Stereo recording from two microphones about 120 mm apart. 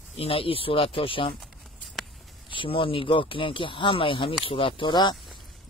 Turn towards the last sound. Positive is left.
turn(degrees=40)  # may be behind; listen again after turning